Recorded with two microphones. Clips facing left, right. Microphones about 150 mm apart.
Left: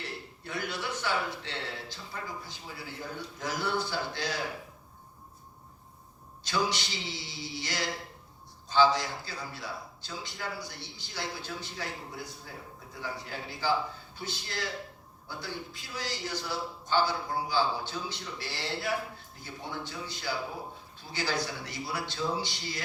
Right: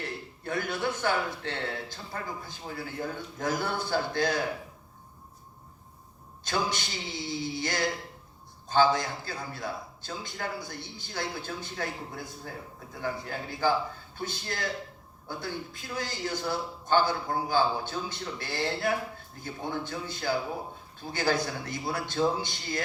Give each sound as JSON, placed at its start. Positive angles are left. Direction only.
{"t": 0.4, "sound": "a man's voice", "side_deg": -50}
{"t": 6.4, "sound": "a man's voice", "side_deg": -50}